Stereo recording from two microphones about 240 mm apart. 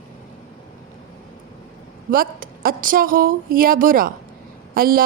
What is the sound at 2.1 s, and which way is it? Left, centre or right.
A woman's voice, right.